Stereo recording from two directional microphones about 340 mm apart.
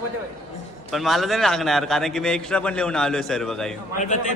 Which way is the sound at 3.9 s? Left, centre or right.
Left.